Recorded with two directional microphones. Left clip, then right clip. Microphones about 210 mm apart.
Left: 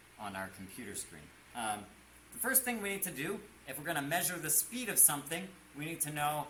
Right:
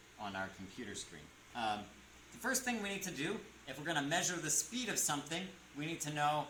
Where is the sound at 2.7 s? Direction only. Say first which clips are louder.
Left 2 dB; 15° left (ahead or behind).